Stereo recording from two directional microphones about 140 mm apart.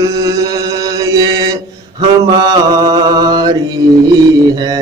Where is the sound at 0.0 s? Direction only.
25° right (ahead or behind).